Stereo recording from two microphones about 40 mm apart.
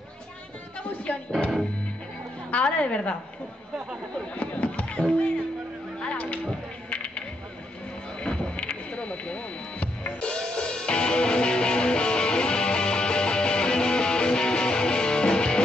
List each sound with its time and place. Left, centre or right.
2.5 s a woman's voice: left
4.4 s a sound: left
10.2 s music: left